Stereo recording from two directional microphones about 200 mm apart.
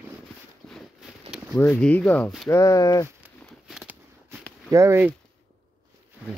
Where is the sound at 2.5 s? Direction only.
15° left (ahead or behind).